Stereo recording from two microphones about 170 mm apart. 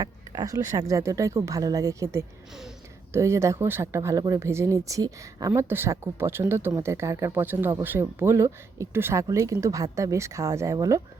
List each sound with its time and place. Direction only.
0.0 s speech: 20° right (ahead or behind)
2.5 s speech: centre (ahead or behind)
3.1 s speech: 15° right (ahead or behind)